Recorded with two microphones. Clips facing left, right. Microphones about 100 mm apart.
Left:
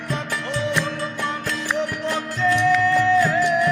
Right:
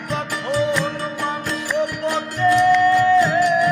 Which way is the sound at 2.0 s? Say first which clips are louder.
Right 3 dB; 15° right (ahead or behind).